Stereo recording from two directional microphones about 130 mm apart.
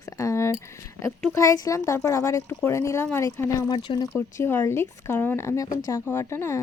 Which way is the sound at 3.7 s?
35° left (ahead or behind).